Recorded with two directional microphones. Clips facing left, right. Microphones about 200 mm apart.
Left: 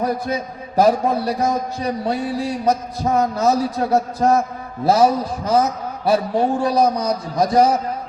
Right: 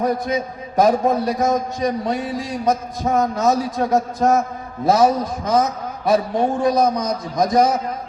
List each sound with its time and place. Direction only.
0.8 s a man's voice: 35° left (ahead or behind)